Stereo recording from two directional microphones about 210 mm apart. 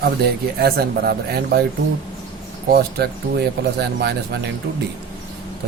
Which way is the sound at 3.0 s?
50° right (ahead or behind).